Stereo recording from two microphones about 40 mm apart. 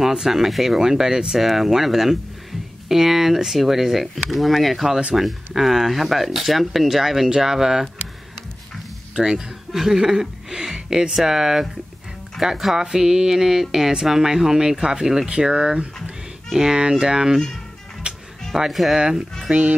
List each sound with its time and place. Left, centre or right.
0.0 s speech: centre
9.1 s speech: centre
18.1 s music: right
18.7 s speech: centre
18.9 s speech: centre